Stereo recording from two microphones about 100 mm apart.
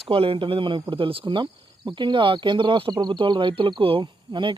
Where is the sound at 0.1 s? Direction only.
65° right (ahead or behind).